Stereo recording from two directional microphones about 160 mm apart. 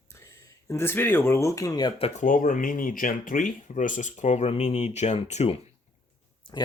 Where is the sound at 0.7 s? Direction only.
15° left (ahead or behind).